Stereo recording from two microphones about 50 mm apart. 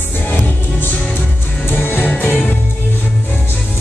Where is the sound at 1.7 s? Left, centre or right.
Left.